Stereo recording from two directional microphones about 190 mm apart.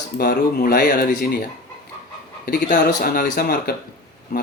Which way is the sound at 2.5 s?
50° left (ahead or behind).